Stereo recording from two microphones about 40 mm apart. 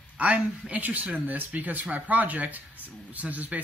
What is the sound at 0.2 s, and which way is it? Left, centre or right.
Speech, right.